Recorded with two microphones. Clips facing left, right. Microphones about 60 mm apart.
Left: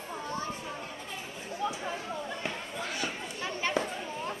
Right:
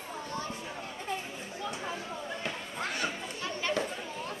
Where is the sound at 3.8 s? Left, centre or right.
Centre.